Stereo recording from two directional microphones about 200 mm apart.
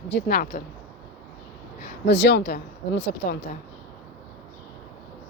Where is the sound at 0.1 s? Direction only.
50° left (ahead or behind).